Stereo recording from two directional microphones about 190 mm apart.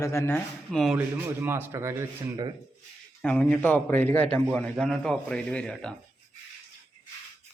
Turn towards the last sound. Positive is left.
turn(degrees=5)  # may be behind; listen again after turning